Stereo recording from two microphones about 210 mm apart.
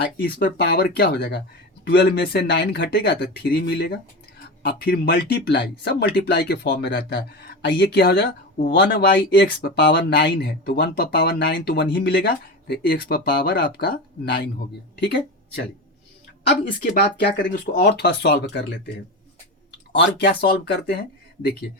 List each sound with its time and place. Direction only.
0.0 s speech: 50° left (ahead or behind)
16.8 s speech: 40° left (ahead or behind)
17.2 s speech: 55° left (ahead or behind)
20.1 s speech: 50° left (ahead or behind)